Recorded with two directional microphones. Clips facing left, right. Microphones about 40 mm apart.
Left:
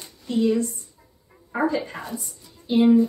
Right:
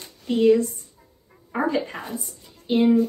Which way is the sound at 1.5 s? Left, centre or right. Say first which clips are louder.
Even; centre.